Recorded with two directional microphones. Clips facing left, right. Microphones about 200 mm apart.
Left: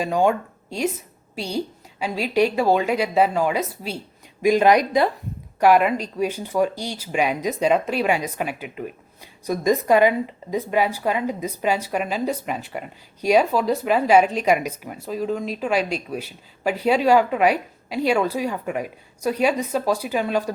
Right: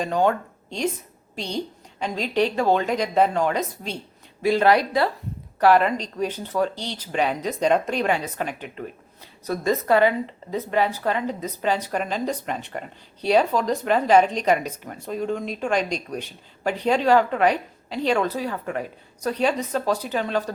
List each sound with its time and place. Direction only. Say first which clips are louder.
0.0 s speech: left 2 dB; 10° left (ahead or behind)